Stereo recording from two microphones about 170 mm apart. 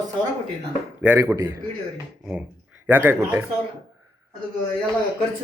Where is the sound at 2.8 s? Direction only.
10° right (ahead or behind).